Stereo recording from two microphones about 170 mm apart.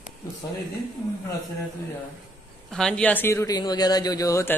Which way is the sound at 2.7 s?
5° left (ahead or behind).